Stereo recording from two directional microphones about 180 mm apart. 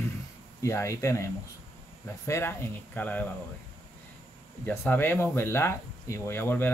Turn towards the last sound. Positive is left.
turn(degrees=10)  # may be behind; listen again after turning